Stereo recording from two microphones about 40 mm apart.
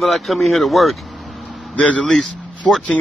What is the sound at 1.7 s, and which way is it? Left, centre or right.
Speech, left.